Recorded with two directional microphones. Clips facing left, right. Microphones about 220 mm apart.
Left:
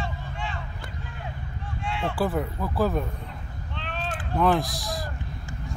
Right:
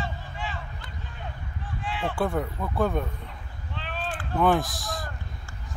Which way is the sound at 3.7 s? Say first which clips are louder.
Even; 5° right (ahead or behind).